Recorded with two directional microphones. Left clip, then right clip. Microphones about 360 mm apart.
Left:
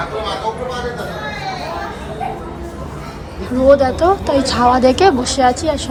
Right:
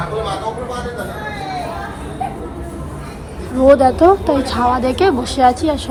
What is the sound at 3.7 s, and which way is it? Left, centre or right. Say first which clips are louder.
Speech: right 2 dB; centre.